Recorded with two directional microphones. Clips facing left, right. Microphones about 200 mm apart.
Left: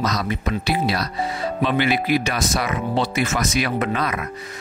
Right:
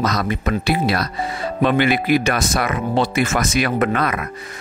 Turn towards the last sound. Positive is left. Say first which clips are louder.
# right 4 dB
turn(degrees=-55)  # may be behind; listen again after turning